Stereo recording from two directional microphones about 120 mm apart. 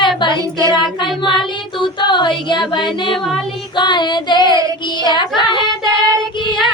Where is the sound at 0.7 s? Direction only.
40° left (ahead or behind).